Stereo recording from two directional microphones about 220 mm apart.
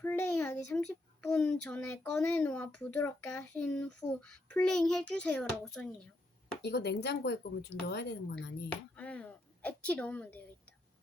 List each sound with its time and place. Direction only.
0.0 s a child's voice: 10° left (ahead or behind)
6.6 s speech: 50° left (ahead or behind)
9.0 s a woman's voice: 5° left (ahead or behind)